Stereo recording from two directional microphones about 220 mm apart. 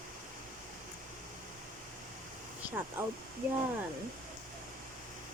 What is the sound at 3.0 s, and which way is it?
Speech, 10° right (ahead or behind).